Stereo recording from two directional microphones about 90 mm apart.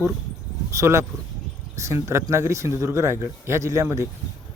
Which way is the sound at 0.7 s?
35° right (ahead or behind).